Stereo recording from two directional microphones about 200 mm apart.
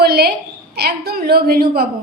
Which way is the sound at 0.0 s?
50° right (ahead or behind).